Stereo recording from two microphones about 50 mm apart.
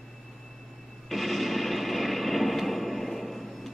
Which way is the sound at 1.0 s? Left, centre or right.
Centre.